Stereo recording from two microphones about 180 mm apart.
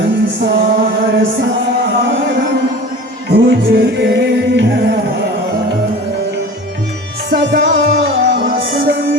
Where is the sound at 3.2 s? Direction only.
60° right (ahead or behind).